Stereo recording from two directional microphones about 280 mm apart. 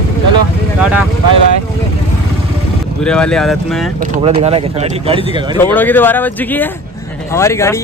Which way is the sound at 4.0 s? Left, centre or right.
Centre.